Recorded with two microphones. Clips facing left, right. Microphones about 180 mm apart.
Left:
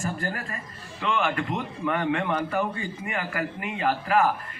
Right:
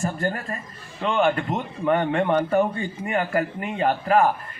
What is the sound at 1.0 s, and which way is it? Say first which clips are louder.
A man's voice: right 5 dB; 35° right (ahead or behind).